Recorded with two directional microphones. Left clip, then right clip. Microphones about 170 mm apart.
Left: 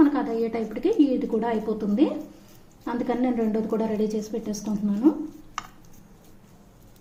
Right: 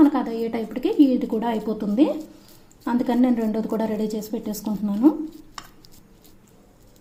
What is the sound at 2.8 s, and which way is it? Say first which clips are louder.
A woman's voice: right 4 dB; 45° right (ahead or behind).